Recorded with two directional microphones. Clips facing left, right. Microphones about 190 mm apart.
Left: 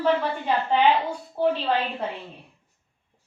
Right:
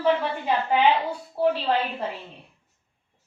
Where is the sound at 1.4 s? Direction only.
5° right (ahead or behind).